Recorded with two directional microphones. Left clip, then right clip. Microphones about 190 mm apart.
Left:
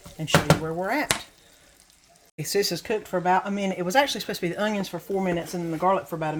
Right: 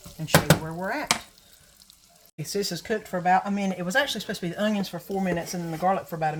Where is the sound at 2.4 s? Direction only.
35° left (ahead or behind).